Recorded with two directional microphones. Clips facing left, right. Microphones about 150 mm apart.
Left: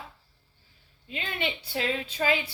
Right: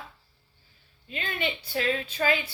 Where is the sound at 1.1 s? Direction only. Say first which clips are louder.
Right 1 dB; 20° left (ahead or behind).